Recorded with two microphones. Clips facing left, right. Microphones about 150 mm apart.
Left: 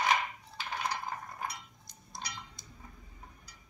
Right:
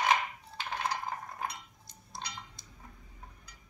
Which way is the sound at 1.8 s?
30° right (ahead or behind).